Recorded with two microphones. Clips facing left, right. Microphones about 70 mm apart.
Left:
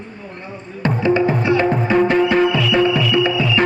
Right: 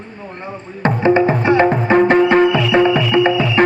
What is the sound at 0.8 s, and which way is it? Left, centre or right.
Music, right.